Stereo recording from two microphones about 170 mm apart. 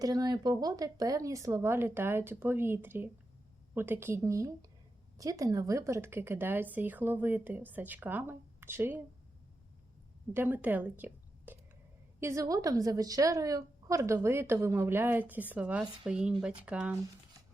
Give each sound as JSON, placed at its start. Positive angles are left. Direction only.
{"t": 0.0, "sound": "a woman's voice", "side_deg": -20}
{"t": 10.3, "sound": "a woman's voice", "side_deg": -10}